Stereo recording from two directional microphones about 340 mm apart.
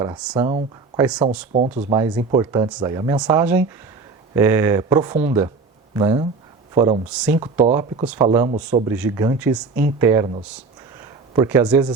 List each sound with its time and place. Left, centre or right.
0.0 s speech: centre
1.5 s speech: right
11.3 s speech: centre